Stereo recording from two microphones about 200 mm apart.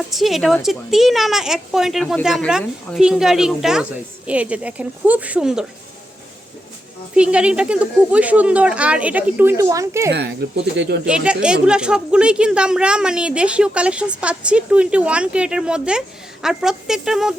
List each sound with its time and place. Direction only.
0.1 s speech: centre (ahead or behind)
7.2 s speech: 5° right (ahead or behind)
10.1 s speech: 55° right (ahead or behind)
11.0 s speech: 5° right (ahead or behind)